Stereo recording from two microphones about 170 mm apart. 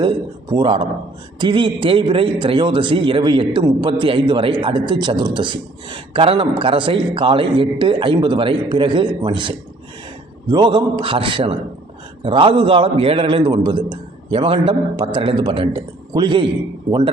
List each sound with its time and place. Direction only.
0.0 s a man's voice: 25° right (ahead or behind)